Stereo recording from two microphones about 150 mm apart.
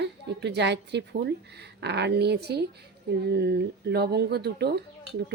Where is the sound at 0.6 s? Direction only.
90° right.